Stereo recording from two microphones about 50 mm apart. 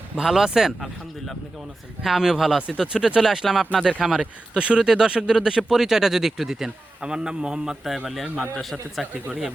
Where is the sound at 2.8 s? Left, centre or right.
Centre.